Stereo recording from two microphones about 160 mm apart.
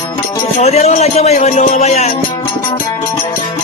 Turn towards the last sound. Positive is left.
turn(degrees=45)  # may be behind; listen again after turning